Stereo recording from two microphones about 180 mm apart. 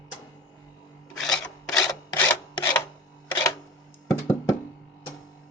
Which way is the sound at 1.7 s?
20° left (ahead or behind).